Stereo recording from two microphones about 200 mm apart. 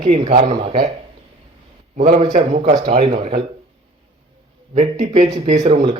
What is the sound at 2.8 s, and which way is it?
Speech, 25° right (ahead or behind).